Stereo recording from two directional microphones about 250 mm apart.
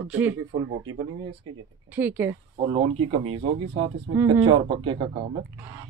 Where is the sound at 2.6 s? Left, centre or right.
Right.